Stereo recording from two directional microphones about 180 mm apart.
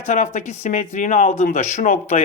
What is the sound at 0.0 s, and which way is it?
Speech, 40° left (ahead or behind).